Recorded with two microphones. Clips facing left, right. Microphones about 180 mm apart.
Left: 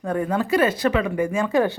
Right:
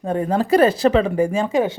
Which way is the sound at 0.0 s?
30° right (ahead or behind).